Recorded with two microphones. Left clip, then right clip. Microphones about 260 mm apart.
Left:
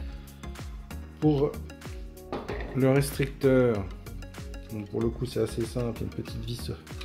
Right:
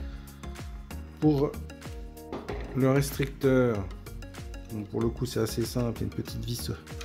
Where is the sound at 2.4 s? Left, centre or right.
Centre; by 5.6 s right.